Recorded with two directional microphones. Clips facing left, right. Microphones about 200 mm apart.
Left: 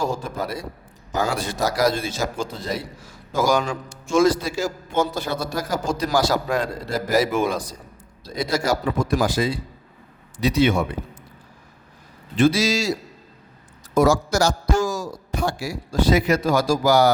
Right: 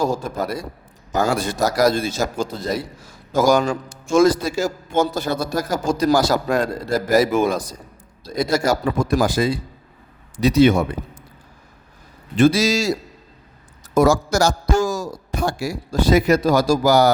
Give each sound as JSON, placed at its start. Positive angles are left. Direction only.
{"t": 0.0, "sound": "a man's voice", "side_deg": -40}
{"t": 12.4, "sound": "a man's voice", "side_deg": -45}
{"t": 13.9, "sound": "a man's voice", "side_deg": -45}